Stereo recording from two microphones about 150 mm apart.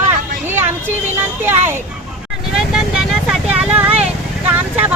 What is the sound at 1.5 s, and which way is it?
Speech, 15° right (ahead or behind).